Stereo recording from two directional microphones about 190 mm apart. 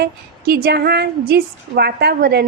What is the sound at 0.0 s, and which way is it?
A woman's voice, 55° right (ahead or behind).